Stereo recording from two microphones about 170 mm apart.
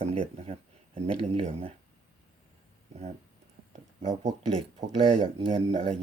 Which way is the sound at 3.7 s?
45° right (ahead or behind).